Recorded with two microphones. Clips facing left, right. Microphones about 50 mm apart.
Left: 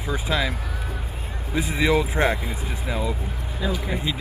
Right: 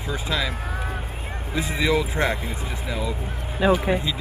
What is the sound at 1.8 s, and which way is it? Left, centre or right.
Speech, centre.